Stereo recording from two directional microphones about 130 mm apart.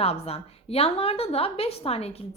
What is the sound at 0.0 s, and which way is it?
A woman's voice, 50° left (ahead or behind).